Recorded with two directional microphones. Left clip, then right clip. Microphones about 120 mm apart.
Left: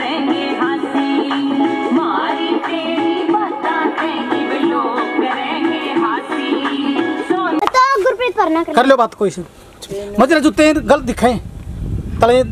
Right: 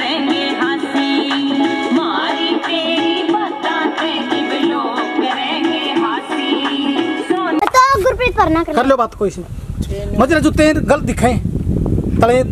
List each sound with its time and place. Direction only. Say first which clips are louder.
0.1 s music: right 1 dB; 45° right (ahead or behind); by 7.3 s 25° right (ahead or behind)
7.6 s a sound: right 2 dB; 30° right (ahead or behind)
8.7 s speech: left 6 dB; 5° left (ahead or behind)